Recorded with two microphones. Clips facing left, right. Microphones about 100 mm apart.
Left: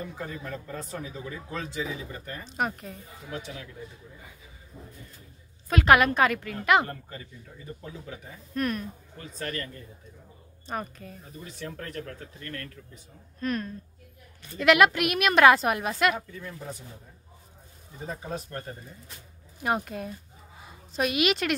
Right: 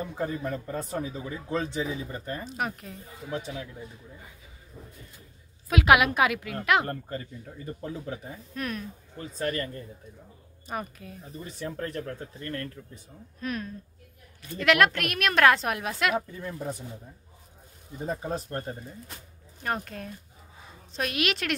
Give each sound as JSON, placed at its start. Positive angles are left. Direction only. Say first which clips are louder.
{"t": 0.2, "sound": "speech", "louder": "right 6 dB", "side_deg": -25}
{"t": 2.4, "sound": "a woman's voice", "louder": "left 2 dB", "side_deg": 0}
{"t": 3.3, "sound": "speech", "louder": "right 4 dB", "side_deg": -30}
{"t": 5.7, "sound": "a woman's voice", "louder": "left 1 dB", "side_deg": -5}
{"t": 6.9, "sound": "speech", "louder": "right 6 dB", "side_deg": -40}
{"t": 8.5, "sound": "a woman's voice", "louder": "left 5 dB", "side_deg": 0}
{"t": 9.2, "sound": "speech", "louder": "right 5 dB", "side_deg": -30}
{"t": 10.7, "sound": "a woman's voice", "louder": "left 1 dB", "side_deg": -5}
{"t": 11.6, "sound": "speech", "louder": "right 4 dB", "side_deg": -30}
{"t": 13.4, "sound": "a woman's voice", "louder": "left 3 dB", "side_deg": -5}
{"t": 16.2, "sound": "speech", "louder": "right 5 dB", "side_deg": -35}
{"t": 18.0, "sound": "speech", "louder": "right 4 dB", "side_deg": -35}
{"t": 19.6, "sound": "a woman's voice", "louder": "left 3 dB", "side_deg": 5}